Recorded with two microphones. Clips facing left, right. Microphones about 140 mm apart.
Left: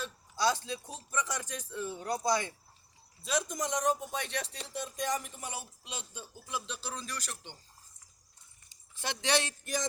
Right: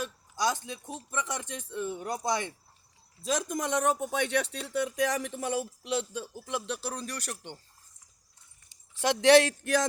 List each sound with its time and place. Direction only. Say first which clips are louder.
0.0 s speech: right 1 dB; 15° right (ahead or behind)
3.2 s speech: right 3 dB; 40° right (ahead or behind)
3.6 s speech: right 4 dB; 60° right (ahead or behind)
8.7 s speech: right 10 dB; 75° right (ahead or behind)